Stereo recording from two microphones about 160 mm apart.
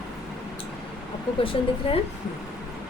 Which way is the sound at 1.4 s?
35° left (ahead or behind).